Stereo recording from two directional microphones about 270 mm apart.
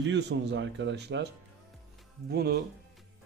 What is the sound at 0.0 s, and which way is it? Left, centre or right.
Speech, right.